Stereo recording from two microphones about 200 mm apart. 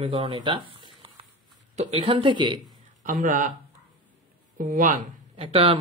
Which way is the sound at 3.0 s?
40° right (ahead or behind).